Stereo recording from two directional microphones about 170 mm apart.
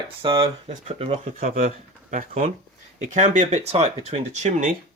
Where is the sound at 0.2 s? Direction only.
30° right (ahead or behind).